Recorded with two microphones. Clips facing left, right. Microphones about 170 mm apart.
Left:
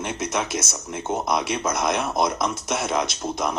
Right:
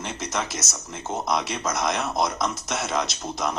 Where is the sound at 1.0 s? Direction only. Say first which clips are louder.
Left 3 dB; 30° left (ahead or behind).